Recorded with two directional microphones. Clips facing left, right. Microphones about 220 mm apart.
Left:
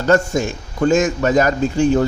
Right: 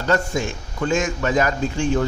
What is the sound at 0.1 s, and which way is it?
Speech, 40° left (ahead or behind).